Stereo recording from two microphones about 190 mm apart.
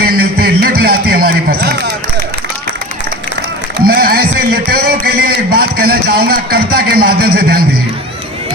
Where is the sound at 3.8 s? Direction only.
55° right (ahead or behind).